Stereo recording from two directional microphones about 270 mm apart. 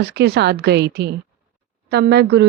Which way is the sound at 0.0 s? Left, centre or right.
Right.